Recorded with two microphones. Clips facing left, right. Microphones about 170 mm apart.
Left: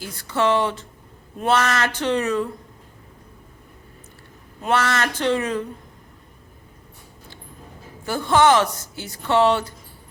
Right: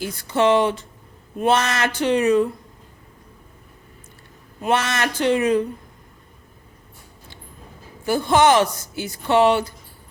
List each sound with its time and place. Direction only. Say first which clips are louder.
0.0 s speech: right 3 dB; 20° right (ahead or behind)
4.6 s speech: even; 20° right (ahead or behind)
8.0 s speech: right 1 dB; 15° right (ahead or behind)